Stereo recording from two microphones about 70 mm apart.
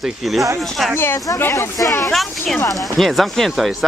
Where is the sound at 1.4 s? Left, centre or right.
Left.